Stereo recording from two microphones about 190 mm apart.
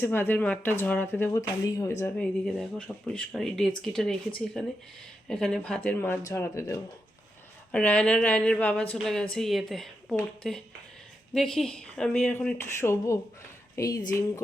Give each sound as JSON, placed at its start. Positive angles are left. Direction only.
{"t": 0.0, "sound": "speech", "side_deg": 10}
{"t": 2.1, "sound": "a woman's voice", "side_deg": 5}